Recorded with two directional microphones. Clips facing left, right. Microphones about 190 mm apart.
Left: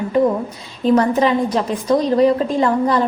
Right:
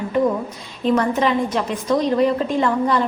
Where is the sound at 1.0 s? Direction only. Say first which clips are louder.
Left 3 dB; 35° left (ahead or behind).